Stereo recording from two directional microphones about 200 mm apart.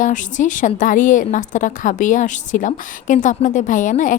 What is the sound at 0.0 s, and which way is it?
A woman's voice, 40° left (ahead or behind).